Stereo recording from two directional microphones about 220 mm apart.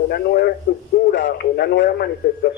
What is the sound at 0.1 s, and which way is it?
A man's voice, 45° left (ahead or behind).